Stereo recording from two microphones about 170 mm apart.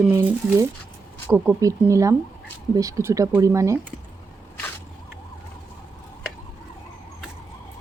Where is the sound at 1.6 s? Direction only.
20° right (ahead or behind).